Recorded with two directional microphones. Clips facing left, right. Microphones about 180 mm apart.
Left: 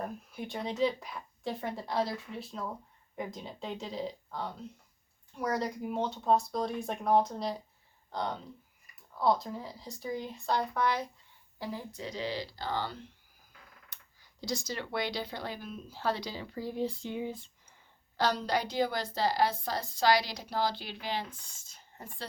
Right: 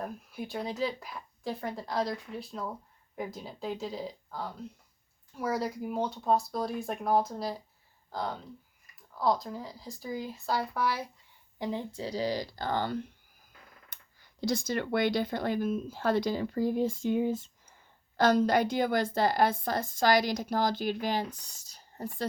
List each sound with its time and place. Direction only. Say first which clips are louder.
0.0 s speech: right 1 dB; centre (ahead or behind)
11.6 s a woman's voice: right 5 dB; 20° right (ahead or behind); by 22.3 s 40° right (ahead or behind)